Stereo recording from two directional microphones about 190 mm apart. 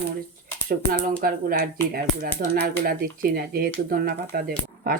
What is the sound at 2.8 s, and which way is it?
Speech, 50° right (ahead or behind).